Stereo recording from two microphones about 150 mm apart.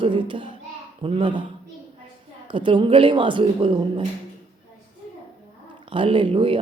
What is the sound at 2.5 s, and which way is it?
A man's voice, 35° right (ahead or behind).